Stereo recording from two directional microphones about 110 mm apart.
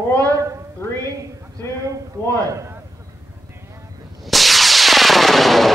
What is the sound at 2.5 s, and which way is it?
Speech, 25° right (ahead or behind).